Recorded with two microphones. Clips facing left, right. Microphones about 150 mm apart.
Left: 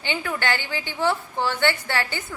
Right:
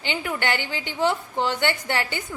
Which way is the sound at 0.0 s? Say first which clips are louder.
Even; 20° right (ahead or behind).